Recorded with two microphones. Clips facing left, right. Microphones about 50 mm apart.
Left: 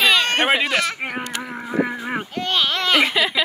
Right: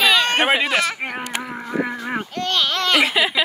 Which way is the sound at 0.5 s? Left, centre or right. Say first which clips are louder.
Right 1 dB; centre.